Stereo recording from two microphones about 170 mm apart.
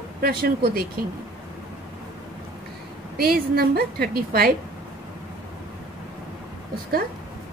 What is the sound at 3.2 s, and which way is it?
A woman's voice, 65° right (ahead or behind).